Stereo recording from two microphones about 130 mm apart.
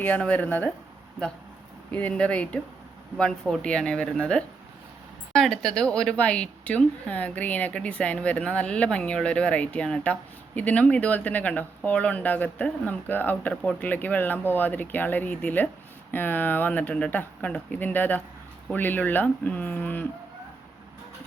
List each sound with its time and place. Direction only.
0.0 s a woman's voice: 10° left (ahead or behind)
1.9 s a woman's voice: 10° left (ahead or behind)